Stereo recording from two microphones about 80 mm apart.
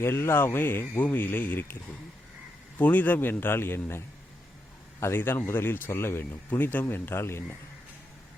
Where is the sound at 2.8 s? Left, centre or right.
Left.